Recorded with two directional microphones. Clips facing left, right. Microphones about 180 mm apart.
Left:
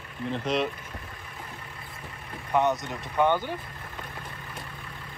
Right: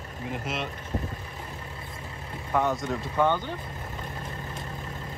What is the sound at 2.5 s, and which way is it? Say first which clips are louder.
Speech: left 1 dB; 20° left (ahead or behind).